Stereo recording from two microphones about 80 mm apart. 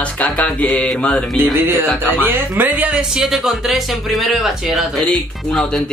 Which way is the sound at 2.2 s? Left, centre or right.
Right.